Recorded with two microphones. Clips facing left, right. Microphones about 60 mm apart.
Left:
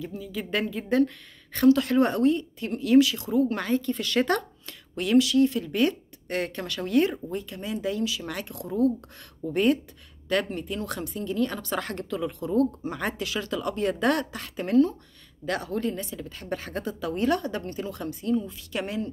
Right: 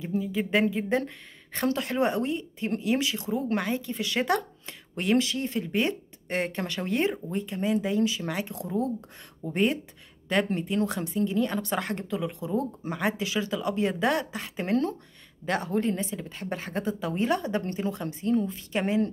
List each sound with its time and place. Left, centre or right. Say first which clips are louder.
0.0 s speech: right 5 dB; right
4.6 s speech: right 2 dB; right